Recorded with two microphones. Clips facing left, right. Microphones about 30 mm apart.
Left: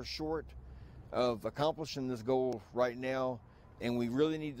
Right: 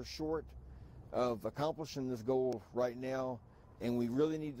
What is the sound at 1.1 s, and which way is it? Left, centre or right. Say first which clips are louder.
Speech: left 2 dB; left.